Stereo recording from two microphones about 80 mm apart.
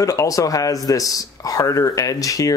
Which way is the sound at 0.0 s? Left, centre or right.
Left.